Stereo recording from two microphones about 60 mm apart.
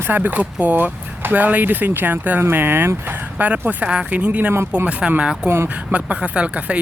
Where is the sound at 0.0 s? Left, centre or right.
Right.